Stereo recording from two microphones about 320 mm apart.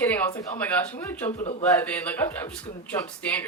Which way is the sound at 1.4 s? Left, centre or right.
Left.